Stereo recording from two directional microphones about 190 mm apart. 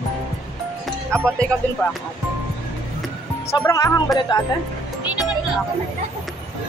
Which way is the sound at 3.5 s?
15° left (ahead or behind).